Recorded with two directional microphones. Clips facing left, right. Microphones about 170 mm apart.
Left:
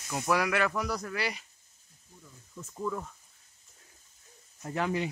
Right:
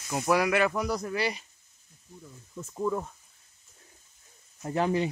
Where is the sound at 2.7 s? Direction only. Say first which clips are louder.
Right 5 dB; 30° right (ahead or behind).